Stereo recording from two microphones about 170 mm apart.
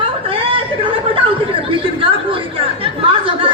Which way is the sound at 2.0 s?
30° right (ahead or behind).